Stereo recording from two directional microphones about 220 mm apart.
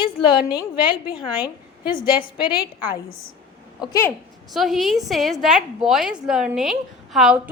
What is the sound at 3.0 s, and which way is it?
Speech, 65° left (ahead or behind).